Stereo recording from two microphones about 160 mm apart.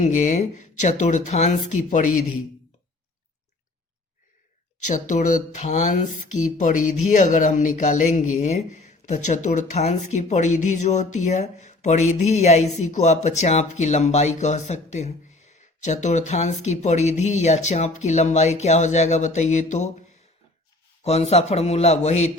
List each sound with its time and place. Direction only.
0.0 s speech: 50° left (ahead or behind)
4.9 s speech: 50° left (ahead or behind)
21.0 s a man's voice: 40° left (ahead or behind)